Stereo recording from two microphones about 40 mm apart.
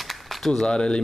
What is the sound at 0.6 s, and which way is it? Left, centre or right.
Speech, centre.